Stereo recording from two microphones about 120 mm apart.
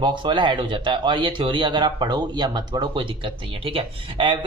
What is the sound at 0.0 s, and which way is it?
Speech, 40° right (ahead or behind).